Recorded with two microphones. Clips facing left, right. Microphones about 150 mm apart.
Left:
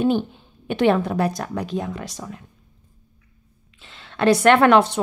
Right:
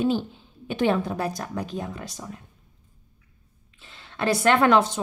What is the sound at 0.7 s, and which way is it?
A woman's voice, 70° left (ahead or behind).